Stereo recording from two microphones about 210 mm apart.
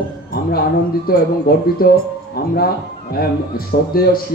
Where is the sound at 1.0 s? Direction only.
45° left (ahead or behind).